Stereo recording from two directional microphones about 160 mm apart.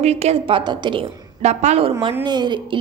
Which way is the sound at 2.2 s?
25° right (ahead or behind).